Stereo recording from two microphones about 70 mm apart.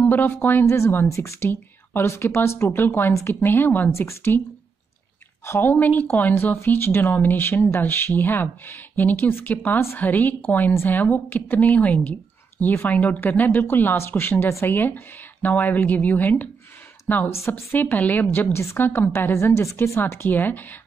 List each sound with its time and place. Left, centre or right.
0.0 s speech: left
1.5 s a woman's voice: left
3.9 s a woman's voice: left
5.4 s a woman's voice: left
20.0 s speech: left